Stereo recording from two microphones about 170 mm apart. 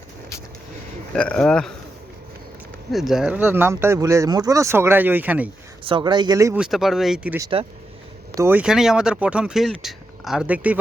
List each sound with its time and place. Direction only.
1.1 s speech: 5° left (ahead or behind)
2.9 s speech: centre (ahead or behind)
5.8 s speech: 30° right (ahead or behind)
6.6 s speech: centre (ahead or behind)
8.4 s speech: 10° right (ahead or behind)